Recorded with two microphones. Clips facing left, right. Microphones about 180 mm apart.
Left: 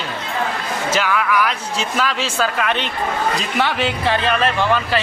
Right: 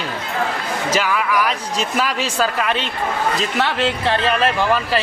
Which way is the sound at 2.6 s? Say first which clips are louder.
Even; 5° right (ahead or behind).